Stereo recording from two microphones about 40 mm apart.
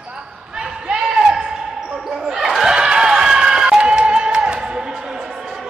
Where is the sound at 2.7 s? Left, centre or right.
Centre.